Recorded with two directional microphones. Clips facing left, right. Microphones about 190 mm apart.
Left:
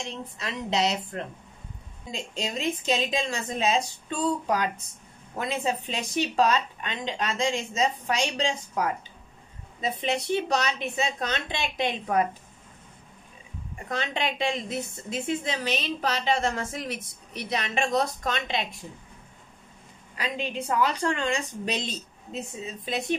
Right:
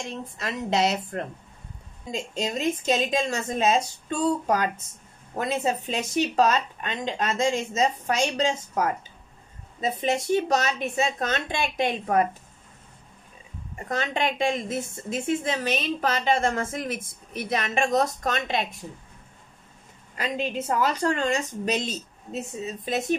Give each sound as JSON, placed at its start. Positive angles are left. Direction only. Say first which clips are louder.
{"t": 0.4, "sound": "a woman's voice", "louder": "right 3 dB", "side_deg": -50}
{"t": 13.8, "sound": "a woman's voice", "louder": "right 3 dB", "side_deg": -50}
{"t": 20.2, "sound": "a woman's voice", "louder": "right 3 dB", "side_deg": -45}